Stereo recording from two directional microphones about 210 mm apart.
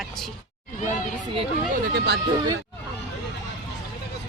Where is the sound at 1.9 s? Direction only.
50° right (ahead or behind).